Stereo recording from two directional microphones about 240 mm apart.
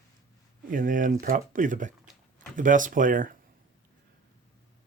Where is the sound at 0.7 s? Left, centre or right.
Right.